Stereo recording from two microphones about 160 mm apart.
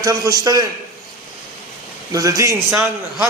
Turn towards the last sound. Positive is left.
turn(degrees=-15)  # may be behind; listen again after turning